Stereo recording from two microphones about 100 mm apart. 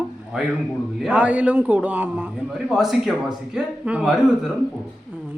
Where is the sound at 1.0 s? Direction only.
15° right (ahead or behind).